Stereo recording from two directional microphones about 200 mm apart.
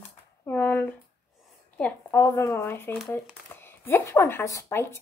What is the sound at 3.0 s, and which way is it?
Speech, centre (ahead or behind).